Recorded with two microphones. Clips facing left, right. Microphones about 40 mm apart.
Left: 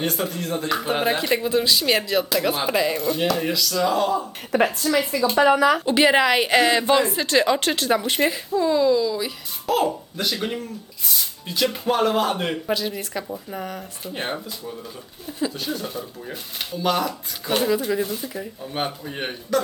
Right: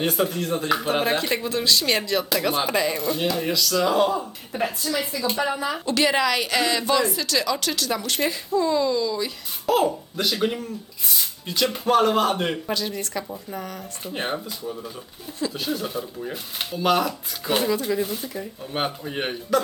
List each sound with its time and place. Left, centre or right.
0.0 s speech: centre
4.5 s a woman's voice: left
5.4 s speech: left
5.8 s a woman's voice: left
8.2 s a woman's voice: centre
14.0 s speech: centre